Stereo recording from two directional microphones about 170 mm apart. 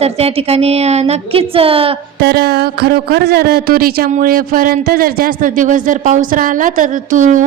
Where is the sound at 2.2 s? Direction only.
70° right (ahead or behind); by 7.4 s 45° right (ahead or behind).